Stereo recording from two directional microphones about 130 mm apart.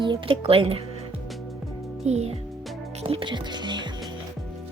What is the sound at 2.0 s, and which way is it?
Speech, 55° right (ahead or behind).